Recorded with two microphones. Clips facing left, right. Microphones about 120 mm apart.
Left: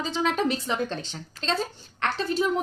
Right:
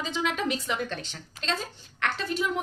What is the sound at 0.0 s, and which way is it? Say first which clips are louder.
A woman's voice: left 4 dB; 35° left (ahead or behind).